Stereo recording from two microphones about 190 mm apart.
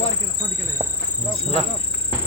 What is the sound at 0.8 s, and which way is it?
Insect, 30° right (ahead or behind).